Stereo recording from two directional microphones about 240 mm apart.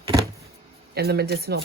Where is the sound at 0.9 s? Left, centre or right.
Right.